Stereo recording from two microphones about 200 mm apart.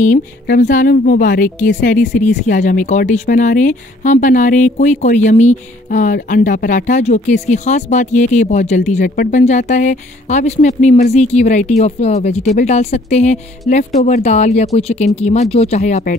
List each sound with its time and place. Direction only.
0.0 s speech: 40° left (ahead or behind)